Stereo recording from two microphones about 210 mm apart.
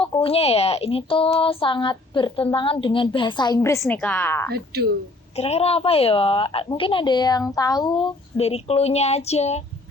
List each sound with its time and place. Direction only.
0.0 s a woman's voice: 25° left (ahead or behind); by 4.4 s 10° left (ahead or behind)
4.5 s speech: 50° right (ahead or behind)
5.4 s speech: 30° left (ahead or behind)